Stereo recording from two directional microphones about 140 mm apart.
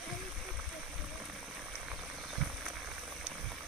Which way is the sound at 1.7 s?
5° right (ahead or behind).